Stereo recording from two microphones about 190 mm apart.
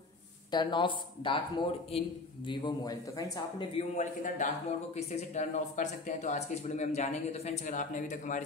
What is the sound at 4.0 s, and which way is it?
Speech, 40° left (ahead or behind).